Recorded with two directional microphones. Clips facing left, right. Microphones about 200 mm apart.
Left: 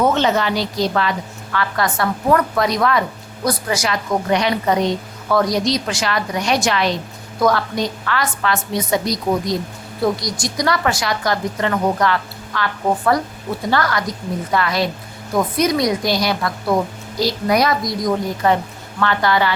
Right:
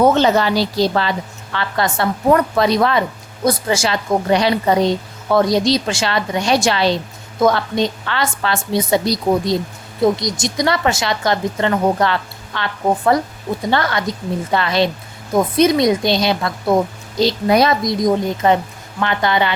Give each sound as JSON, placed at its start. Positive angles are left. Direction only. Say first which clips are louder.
{"t": 0.0, "sound": "a woman's voice", "louder": "right 3 dB", "side_deg": -35}